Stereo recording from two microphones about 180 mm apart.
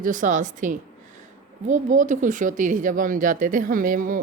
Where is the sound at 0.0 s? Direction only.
45° right (ahead or behind).